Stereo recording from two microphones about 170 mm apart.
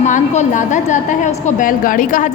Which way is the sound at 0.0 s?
45° left (ahead or behind).